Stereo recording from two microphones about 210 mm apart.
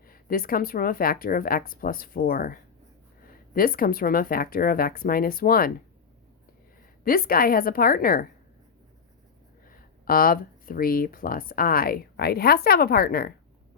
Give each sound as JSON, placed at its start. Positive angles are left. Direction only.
{"t": 0.1, "sound": "speech", "side_deg": 45}
{"t": 7.0, "sound": "speech", "side_deg": 45}
{"t": 9.6, "sound": "speech", "side_deg": 45}